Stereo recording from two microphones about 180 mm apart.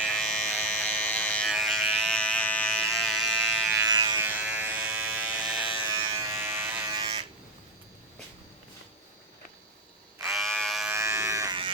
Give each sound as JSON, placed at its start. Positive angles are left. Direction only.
{"t": 0.0, "sound": "electric shaver", "side_deg": 5}
{"t": 3.8, "sound": "electric shaver", "side_deg": -20}
{"t": 4.2, "sound": "electric shaver", "side_deg": -10}
{"t": 6.1, "sound": "electric shaver", "side_deg": -20}
{"t": 6.9, "sound": "electric shaver", "side_deg": -25}
{"t": 10.2, "sound": "frog", "side_deg": 0}
{"t": 10.9, "sound": "electric shaver", "side_deg": -15}